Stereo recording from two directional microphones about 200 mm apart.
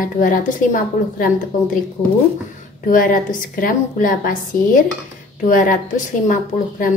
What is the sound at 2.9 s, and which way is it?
A woman's voice, 45° left (ahead or behind).